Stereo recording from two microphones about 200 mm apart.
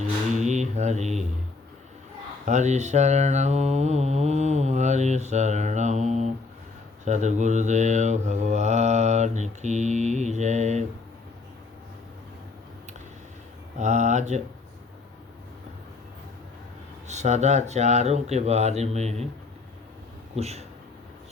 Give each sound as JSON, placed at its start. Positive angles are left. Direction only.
{"t": 0.3, "sound": "a sound", "side_deg": -35}
{"t": 2.4, "sound": "mantra", "side_deg": -35}
{"t": 13.7, "sound": "mantra", "side_deg": -35}
{"t": 17.1, "sound": "mantra", "side_deg": -35}
{"t": 20.3, "sound": "speech", "side_deg": -30}